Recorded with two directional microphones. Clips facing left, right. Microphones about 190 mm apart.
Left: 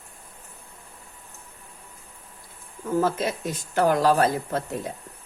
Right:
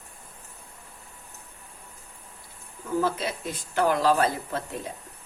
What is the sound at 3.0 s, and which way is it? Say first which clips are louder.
A woman's voice: left 3 dB; 45° left (ahead or behind).